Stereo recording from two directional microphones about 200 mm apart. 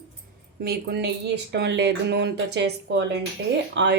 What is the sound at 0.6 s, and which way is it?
A woman's voice, 55° right (ahead or behind).